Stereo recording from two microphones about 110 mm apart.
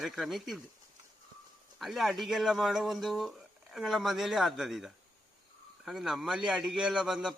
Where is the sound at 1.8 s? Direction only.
Centre (ahead or behind).